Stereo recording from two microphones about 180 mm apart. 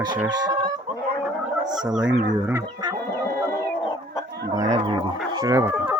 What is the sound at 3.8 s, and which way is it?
Chicken, 25° left (ahead or behind).